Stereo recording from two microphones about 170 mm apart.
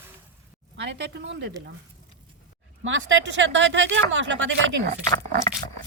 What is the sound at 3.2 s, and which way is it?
Speech, 90° right.